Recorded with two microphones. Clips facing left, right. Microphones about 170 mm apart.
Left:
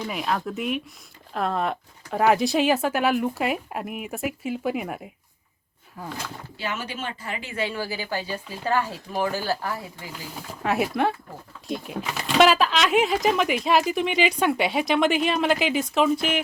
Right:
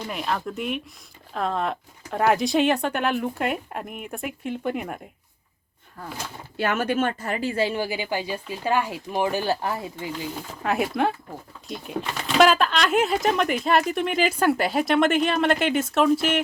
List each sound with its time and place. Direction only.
0.1 s speech: centre (ahead or behind)
6.6 s a woman's voice: 55° right (ahead or behind); by 10.1 s 25° right (ahead or behind)
10.6 s speech: centre (ahead or behind)